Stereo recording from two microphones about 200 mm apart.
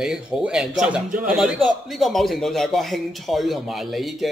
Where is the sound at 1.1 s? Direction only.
45° right (ahead or behind).